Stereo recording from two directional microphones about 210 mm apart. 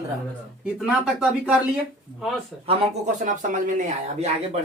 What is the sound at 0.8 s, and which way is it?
Speech, centre (ahead or behind).